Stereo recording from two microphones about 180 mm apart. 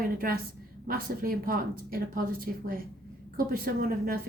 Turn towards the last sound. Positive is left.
turn(degrees=-55)  # may be behind; listen again after turning